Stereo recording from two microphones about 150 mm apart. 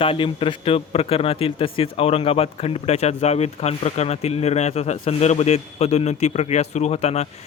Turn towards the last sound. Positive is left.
turn(degrees=45)  # may be behind; listen again after turning